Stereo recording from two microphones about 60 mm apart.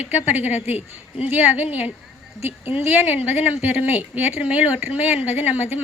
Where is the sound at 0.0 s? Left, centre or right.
Right.